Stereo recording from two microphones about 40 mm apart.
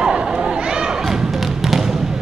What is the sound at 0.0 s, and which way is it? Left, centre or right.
Basketball bounce, right.